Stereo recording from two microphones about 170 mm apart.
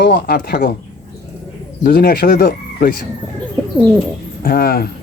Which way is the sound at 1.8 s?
65° left (ahead or behind).